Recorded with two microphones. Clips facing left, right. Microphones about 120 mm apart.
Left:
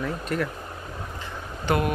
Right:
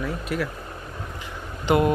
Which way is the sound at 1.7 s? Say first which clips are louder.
Right 4 dB; 15° right (ahead or behind).